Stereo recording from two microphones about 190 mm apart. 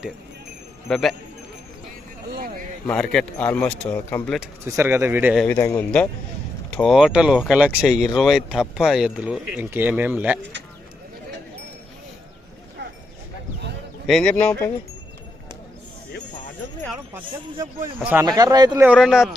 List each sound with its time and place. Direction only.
0.9 s speech: centre (ahead or behind)
2.9 s speech: 5° left (ahead or behind)
4.4 s speech: 15° right (ahead or behind)
5.5 s speech: 15° left (ahead or behind); by 10.4 s 10° right (ahead or behind)
14.1 s speech: 5° left (ahead or behind)
17.6 s speech: 10° right (ahead or behind)
18.9 s speech: centre (ahead or behind)